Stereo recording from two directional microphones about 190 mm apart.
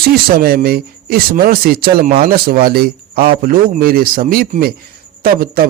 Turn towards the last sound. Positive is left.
turn(degrees=-50)  # may be behind; listen again after turning